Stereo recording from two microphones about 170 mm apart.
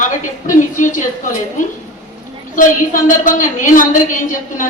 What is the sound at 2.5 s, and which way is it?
A woman's voice, 50° left (ahead or behind).